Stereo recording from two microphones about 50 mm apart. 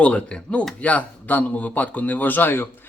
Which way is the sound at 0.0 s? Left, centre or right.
Left.